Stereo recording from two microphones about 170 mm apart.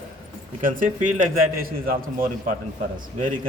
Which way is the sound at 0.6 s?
50° right (ahead or behind).